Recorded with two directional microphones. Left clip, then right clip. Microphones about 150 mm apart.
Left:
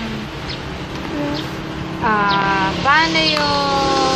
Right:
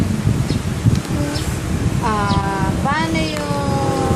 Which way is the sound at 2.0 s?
30° right (ahead or behind).